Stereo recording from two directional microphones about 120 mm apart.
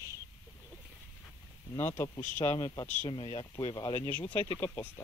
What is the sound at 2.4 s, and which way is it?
Speech, 40° left (ahead or behind).